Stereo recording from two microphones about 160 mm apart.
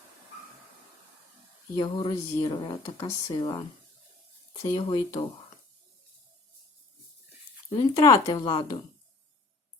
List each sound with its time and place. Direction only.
1.7 s speech: 30° left (ahead or behind)
4.7 s speech: 30° left (ahead or behind)
7.7 s speech: 25° left (ahead or behind)